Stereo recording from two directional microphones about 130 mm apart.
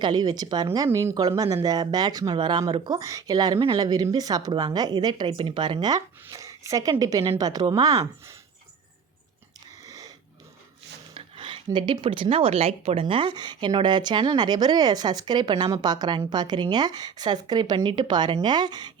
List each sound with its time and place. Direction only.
0.0 s speech: 30° right (ahead or behind)
9.8 s a sound: 25° right (ahead or behind)
11.1 s speech: 40° right (ahead or behind)